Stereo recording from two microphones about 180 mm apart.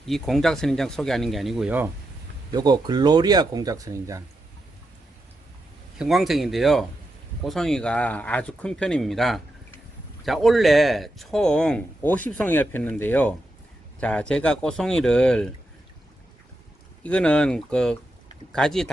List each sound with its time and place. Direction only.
0.0 s speech: centre (ahead or behind)
2.5 s speech: 20° right (ahead or behind)
6.0 s speech: centre (ahead or behind)
17.0 s speech: 5° left (ahead or behind)